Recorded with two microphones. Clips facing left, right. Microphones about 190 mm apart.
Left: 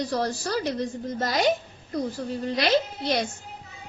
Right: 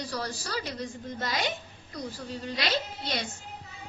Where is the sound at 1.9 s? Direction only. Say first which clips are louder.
Left 8 dB; 55° left (ahead or behind).